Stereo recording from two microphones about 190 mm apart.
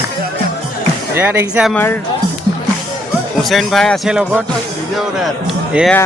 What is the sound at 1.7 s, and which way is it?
Speech, 10° left (ahead or behind).